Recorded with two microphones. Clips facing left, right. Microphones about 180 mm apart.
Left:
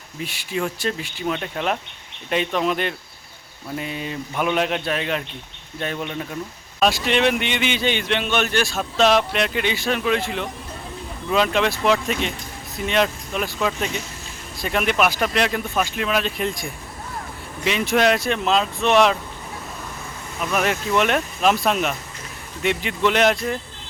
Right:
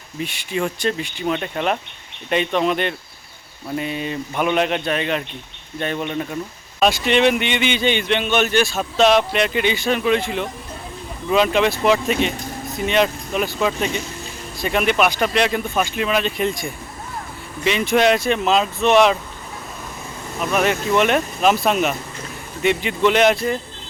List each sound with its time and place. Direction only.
0.2 s a man's voice: centre (ahead or behind)
20.4 s a man's voice: centre (ahead or behind)